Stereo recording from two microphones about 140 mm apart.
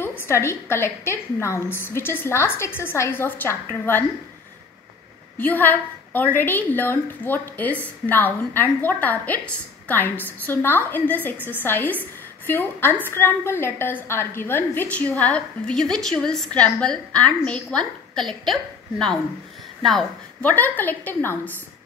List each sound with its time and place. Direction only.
0.0 s a woman's voice: 15° left (ahead or behind)
5.4 s a woman's voice: 15° left (ahead or behind)
20.4 s a woman's voice: 15° left (ahead or behind)